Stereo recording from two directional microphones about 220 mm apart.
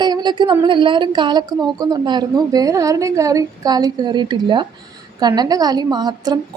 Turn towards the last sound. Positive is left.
turn(degrees=-20)  # may be behind; listen again after turning